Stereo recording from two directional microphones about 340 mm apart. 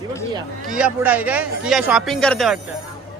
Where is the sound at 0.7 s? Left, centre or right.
Centre.